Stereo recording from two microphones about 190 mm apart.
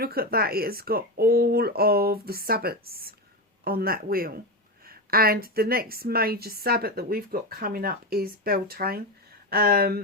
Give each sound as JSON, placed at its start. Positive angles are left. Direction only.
{"t": 0.0, "sound": "a woman's voice", "side_deg": -55}